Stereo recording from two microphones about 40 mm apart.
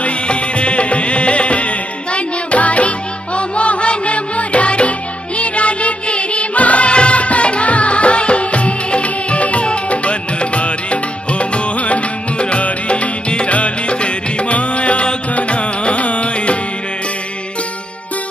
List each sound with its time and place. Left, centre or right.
0.0 s music: left